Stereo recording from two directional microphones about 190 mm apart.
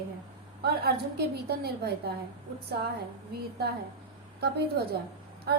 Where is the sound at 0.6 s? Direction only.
55° right (ahead or behind).